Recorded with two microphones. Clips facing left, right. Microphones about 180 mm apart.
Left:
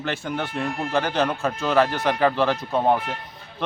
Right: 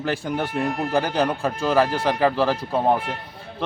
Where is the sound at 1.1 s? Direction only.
15° right (ahead or behind).